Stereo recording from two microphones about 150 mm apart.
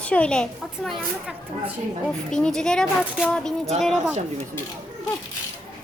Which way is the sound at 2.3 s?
5° left (ahead or behind).